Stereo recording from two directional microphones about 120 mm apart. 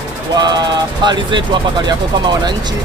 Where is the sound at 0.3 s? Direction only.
35° right (ahead or behind).